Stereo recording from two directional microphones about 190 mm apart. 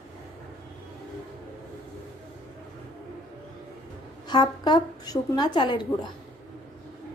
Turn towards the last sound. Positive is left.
turn(degrees=25)  # may be behind; listen again after turning